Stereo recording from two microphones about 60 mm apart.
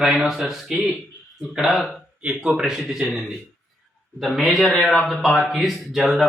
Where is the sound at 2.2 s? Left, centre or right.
Centre.